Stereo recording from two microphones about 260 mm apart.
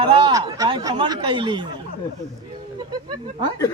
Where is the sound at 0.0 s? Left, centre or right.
Centre.